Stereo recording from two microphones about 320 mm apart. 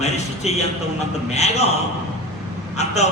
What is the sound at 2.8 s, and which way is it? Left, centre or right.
Speech, left.